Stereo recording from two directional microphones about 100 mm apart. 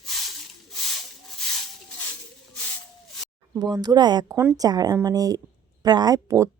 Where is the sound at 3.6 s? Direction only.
40° right (ahead or behind).